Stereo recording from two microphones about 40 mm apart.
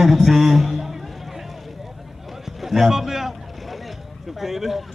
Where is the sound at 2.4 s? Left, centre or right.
Centre.